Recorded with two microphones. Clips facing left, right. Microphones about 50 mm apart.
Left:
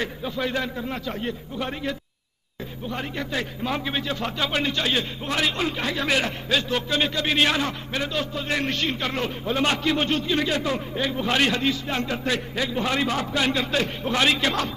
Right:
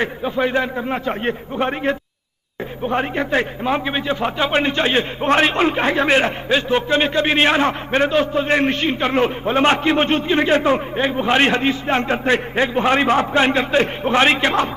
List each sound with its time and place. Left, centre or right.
0.0 s a man's voice: right